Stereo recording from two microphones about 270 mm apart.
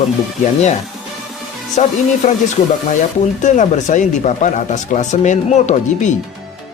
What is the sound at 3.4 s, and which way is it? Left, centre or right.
Speech, left.